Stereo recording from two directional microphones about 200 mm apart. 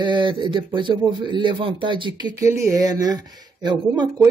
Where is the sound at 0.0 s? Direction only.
25° right (ahead or behind).